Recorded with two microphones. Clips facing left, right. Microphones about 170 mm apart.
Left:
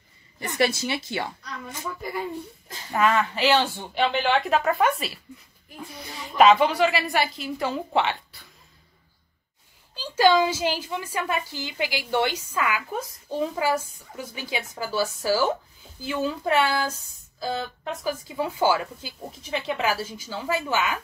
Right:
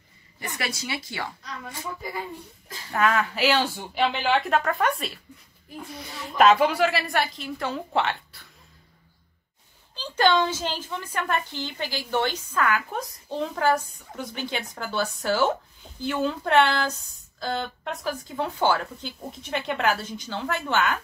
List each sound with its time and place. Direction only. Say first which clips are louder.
0.6 s a woman's voice: left 9 dB; 25° left (ahead or behind)
2.9 s a woman's voice: left 1 dB; centre (ahead or behind)
6.3 s a woman's voice: left 1 dB; centre (ahead or behind)
9.9 s a woman's voice: left 2 dB; 10° left (ahead or behind)